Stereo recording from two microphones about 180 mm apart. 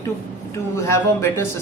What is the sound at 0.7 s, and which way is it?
Speech, 15° left (ahead or behind).